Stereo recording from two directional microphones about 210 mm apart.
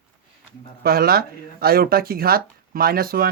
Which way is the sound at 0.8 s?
45° right (ahead or behind).